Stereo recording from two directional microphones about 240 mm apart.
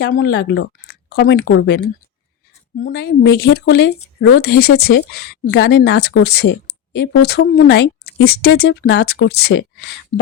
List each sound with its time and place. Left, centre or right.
0.0 s speech: left
2.8 s speech: left